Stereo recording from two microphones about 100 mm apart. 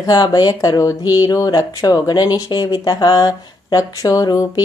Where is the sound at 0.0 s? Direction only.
40° left (ahead or behind).